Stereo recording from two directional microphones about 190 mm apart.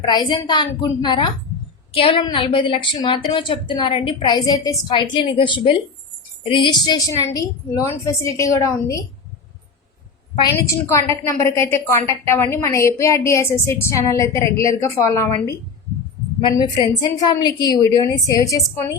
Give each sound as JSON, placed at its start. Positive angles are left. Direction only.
{"t": 0.0, "sound": "a woman's voice", "side_deg": 20}
{"t": 10.8, "sound": "a woman's voice", "side_deg": 15}